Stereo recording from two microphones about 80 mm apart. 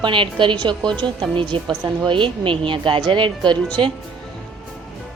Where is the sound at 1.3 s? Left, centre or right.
Right.